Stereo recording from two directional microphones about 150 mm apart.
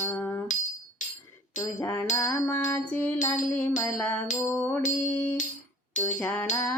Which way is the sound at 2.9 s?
10° left (ahead or behind).